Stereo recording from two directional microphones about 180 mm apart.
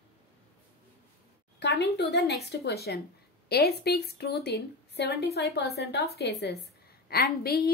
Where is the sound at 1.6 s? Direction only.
70° left (ahead or behind).